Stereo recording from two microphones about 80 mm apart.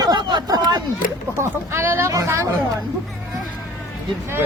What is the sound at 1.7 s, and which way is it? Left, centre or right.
Speech, right.